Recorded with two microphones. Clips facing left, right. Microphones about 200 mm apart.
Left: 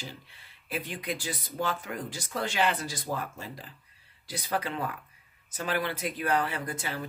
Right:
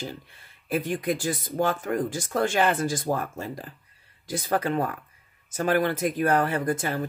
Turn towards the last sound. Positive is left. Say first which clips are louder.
# right 9 dB
turn(degrees=-50)  # may be behind; listen again after turning